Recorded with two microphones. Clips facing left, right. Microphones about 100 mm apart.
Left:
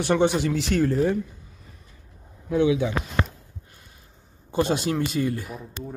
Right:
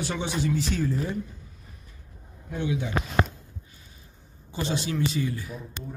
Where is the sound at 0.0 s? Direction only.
60° left (ahead or behind).